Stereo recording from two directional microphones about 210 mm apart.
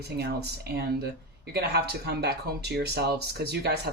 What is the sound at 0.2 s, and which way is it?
Speech, 50° right (ahead or behind).